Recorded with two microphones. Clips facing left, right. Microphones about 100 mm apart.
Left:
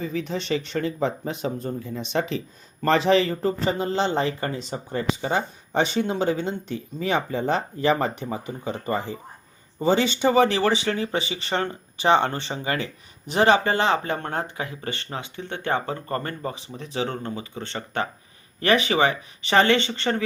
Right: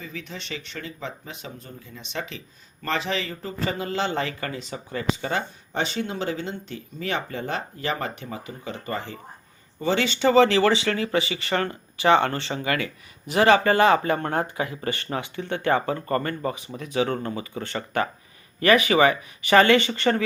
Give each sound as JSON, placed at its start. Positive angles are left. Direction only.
{"t": 0.0, "sound": "speech", "side_deg": 30}
{"t": 0.5, "sound": "speech", "side_deg": 40}
{"t": 3.7, "sound": "speech", "side_deg": 25}
{"t": 5.2, "sound": "speech", "side_deg": 20}
{"t": 14.1, "sound": "speech", "side_deg": 0}
{"t": 14.8, "sound": "speech", "side_deg": 20}
{"t": 16.8, "sound": "speech", "side_deg": 30}